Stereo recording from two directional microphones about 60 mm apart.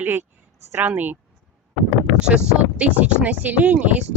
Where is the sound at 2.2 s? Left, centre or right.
Centre.